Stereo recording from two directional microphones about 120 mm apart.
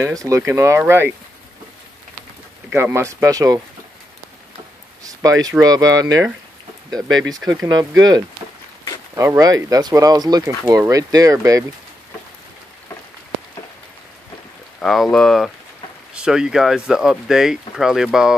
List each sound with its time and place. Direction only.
0.0 s speech: 25° right (ahead or behind)
2.7 s speech: 20° right (ahead or behind)
5.0 s speech: 30° right (ahead or behind)
14.8 s speech: 5° left (ahead or behind)